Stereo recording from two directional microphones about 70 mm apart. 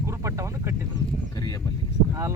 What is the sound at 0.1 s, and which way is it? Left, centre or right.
Vehicle, right.